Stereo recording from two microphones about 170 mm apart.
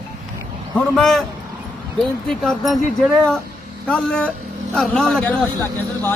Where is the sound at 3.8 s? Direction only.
5° left (ahead or behind).